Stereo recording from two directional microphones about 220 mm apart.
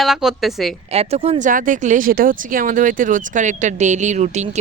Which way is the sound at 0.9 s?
30° right (ahead or behind).